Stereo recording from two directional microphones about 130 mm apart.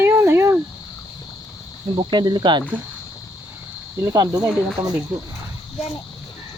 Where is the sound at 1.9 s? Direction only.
35° right (ahead or behind).